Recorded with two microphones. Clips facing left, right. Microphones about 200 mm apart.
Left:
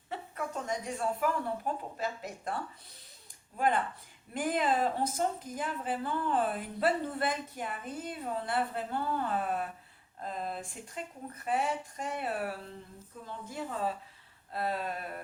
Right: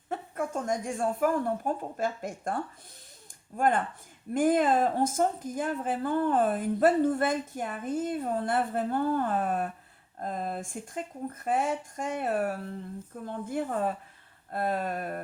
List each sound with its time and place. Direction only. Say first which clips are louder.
0.1 s speech: right 5 dB; 50° right (ahead or behind)
3.6 s speech: right 3 dB; 45° right (ahead or behind)